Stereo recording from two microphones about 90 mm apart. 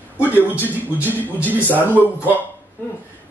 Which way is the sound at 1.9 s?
20° right (ahead or behind).